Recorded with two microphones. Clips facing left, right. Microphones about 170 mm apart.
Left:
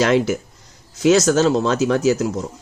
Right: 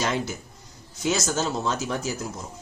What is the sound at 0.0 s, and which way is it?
Speech, 90° left.